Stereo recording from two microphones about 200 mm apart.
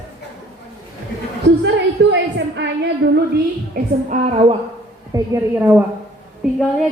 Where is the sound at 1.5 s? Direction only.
60° right (ahead or behind).